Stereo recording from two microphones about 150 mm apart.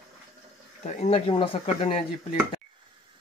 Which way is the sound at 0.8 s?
55° left (ahead or behind).